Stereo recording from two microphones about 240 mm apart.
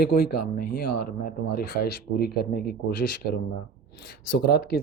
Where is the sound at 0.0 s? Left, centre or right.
Left.